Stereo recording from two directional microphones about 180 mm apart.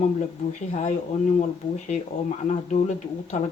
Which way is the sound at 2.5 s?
40° left (ahead or behind).